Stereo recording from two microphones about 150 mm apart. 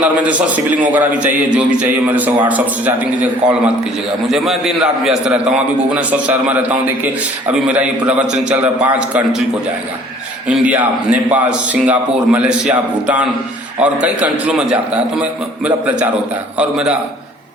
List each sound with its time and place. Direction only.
0.0 s a man's voice: 10° right (ahead or behind)
10.5 s a man's voice: 10° right (ahead or behind)